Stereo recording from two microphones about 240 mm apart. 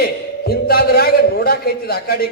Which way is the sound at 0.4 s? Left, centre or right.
Left.